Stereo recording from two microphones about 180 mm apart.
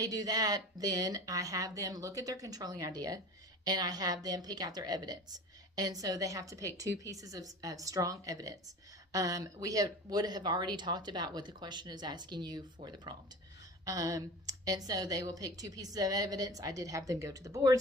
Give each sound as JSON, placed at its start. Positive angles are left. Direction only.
{"t": 0.0, "sound": "a woman's voice", "side_deg": -20}